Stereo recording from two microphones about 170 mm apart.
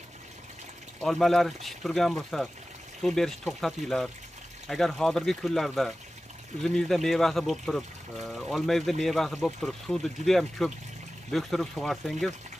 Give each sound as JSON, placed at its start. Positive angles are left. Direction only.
{"t": 1.0, "sound": "speech", "side_deg": 0}